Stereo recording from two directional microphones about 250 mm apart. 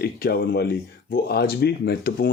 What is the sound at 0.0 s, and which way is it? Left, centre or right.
Speech, left.